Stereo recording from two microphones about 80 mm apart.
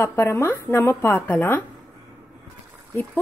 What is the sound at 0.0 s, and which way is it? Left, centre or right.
Speech, left.